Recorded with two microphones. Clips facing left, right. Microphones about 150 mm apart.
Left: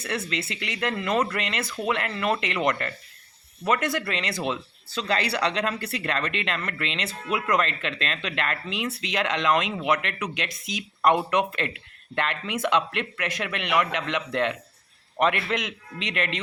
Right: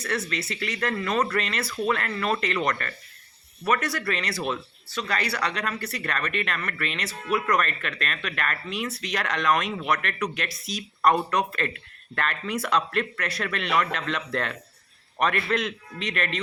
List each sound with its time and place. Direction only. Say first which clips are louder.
0.3 s speech: right 1 dB; 25° left (ahead or behind)